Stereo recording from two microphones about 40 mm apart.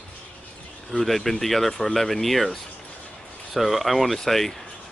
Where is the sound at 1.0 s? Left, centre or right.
Centre.